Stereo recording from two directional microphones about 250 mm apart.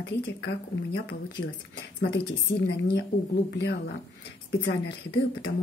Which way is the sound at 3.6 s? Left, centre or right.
Left.